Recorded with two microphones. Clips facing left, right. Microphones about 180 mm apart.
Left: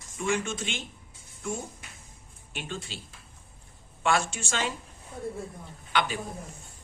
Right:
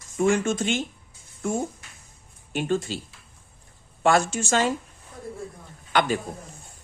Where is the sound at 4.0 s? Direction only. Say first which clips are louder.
Right 6 dB; 40° right (ahead or behind).